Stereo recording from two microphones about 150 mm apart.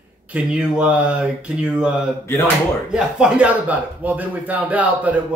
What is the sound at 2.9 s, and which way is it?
Speech, 5° right (ahead or behind).